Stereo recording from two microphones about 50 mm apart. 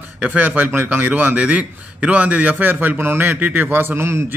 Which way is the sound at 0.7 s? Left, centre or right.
Right.